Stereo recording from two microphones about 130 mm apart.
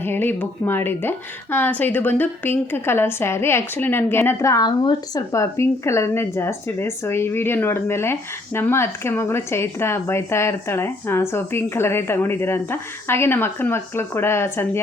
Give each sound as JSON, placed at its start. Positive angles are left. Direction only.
{"t": 0.0, "sound": "a woman's voice", "side_deg": 15}